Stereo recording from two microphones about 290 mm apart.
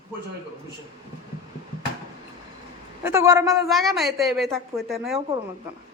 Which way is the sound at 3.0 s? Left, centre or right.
Centre.